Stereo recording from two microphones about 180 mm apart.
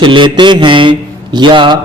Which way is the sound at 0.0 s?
25° right (ahead or behind).